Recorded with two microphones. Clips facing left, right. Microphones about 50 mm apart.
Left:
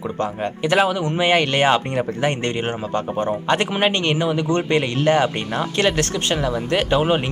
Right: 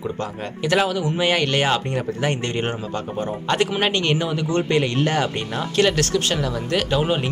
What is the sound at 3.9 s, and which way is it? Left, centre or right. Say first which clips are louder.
Speech: left 1 dB; left.